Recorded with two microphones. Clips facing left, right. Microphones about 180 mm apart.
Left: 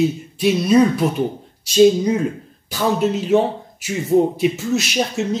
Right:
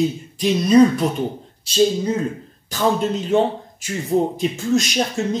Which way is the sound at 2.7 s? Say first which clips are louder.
Left 1 dB; 5° left (ahead or behind).